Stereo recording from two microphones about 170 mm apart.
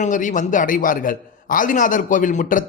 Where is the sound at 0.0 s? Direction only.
50° left (ahead or behind).